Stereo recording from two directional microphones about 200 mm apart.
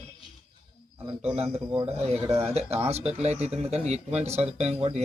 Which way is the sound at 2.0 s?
30° right (ahead or behind).